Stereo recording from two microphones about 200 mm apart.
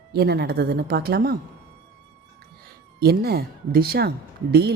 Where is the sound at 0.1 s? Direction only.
55° right (ahead or behind).